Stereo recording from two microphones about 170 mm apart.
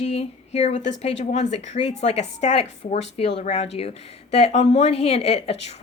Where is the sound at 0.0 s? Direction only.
40° left (ahead or behind).